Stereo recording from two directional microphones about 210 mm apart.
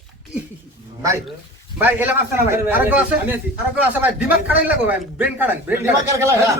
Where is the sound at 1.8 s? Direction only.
10° right (ahead or behind).